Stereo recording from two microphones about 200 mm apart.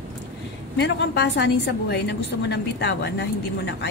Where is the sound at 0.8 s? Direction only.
60° left (ahead or behind).